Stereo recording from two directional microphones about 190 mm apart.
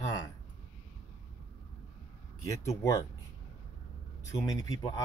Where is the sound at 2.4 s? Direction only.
15° left (ahead or behind).